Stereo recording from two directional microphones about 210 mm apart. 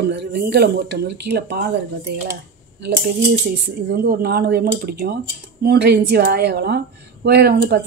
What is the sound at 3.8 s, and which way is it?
Speech, 50° right (ahead or behind).